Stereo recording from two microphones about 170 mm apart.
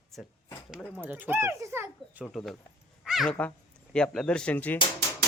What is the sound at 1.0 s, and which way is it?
A child's voice, 10° right (ahead or behind).